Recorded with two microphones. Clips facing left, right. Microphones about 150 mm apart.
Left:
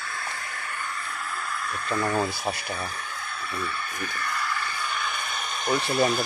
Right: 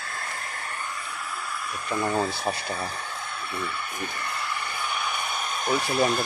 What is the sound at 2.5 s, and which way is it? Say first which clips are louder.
Speech: right 1 dB; 30° right (ahead or behind).